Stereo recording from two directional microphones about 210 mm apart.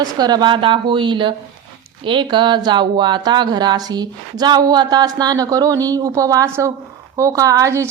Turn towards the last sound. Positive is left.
turn(degrees=-15)  # may be behind; listen again after turning